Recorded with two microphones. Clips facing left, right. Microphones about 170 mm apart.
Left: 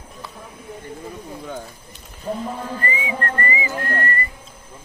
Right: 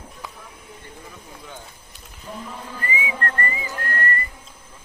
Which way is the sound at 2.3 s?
45° left (ahead or behind).